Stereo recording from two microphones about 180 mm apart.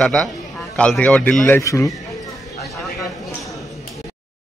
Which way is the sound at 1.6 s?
15° left (ahead or behind).